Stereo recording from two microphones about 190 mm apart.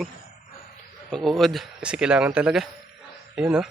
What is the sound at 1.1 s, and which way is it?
A man's voice, centre (ahead or behind).